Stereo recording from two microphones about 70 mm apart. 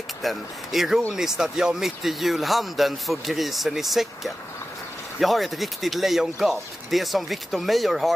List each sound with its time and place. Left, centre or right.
0.2 s speech: centre